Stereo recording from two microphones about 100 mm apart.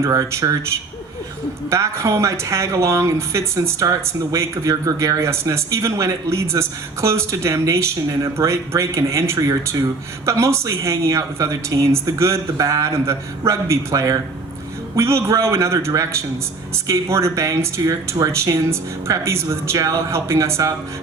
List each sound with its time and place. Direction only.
0.0 s a man's voice: 30° right (ahead or behind)
1.7 s speech: 30° right (ahead or behind)